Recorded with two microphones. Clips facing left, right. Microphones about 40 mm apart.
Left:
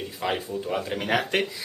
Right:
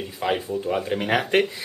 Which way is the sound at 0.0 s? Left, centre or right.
Centre.